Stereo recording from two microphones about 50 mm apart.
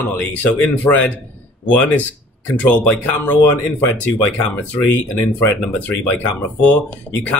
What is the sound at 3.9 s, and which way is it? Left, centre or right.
Speech, left.